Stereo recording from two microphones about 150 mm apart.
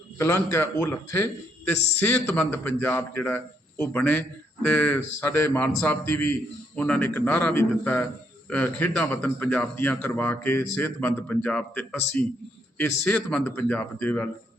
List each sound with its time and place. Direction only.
0.2 s a man's voice: 20° left (ahead or behind)